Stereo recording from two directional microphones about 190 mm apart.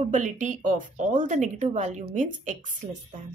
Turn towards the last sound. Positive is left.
turn(degrees=-40)  # may be behind; listen again after turning